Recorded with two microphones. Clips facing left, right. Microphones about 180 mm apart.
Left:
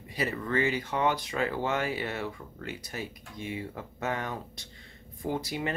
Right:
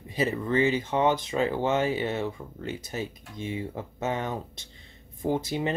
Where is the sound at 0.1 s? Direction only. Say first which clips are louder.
Right 4 dB; 20° right (ahead or behind).